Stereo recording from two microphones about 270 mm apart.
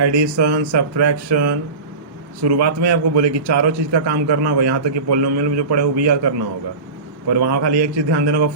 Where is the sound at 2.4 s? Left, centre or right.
Right.